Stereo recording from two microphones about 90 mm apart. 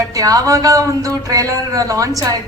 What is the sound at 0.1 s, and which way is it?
A woman's voice, 40° right (ahead or behind).